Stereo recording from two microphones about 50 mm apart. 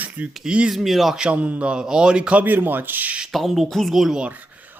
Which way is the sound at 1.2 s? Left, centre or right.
Right.